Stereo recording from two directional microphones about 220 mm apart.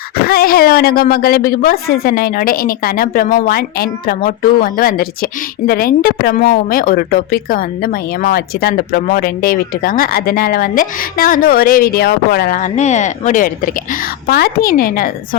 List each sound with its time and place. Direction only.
0.2 s a woman's voice: 45° left (ahead or behind)